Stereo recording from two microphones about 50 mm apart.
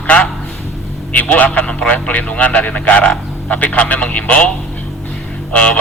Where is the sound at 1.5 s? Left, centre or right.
Left.